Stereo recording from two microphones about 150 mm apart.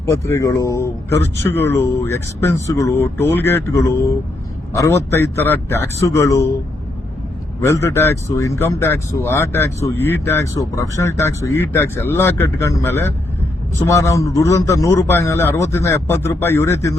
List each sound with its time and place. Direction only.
0.0 s speech: 20° left (ahead or behind)
7.6 s speech: 20° left (ahead or behind)